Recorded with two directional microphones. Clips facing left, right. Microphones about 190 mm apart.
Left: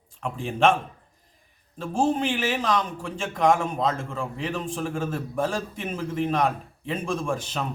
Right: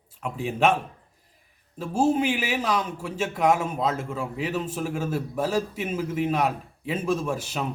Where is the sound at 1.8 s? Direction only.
5° right (ahead or behind).